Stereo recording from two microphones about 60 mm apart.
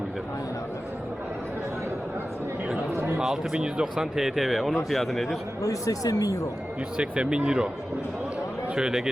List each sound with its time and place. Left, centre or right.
2.9 s a sound: right
3.2 s speech: centre
5.6 s speech: left
6.9 s speech: centre
8.7 s speech: centre